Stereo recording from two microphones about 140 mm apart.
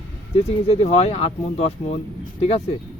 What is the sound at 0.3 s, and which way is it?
Speech, 45° left (ahead or behind).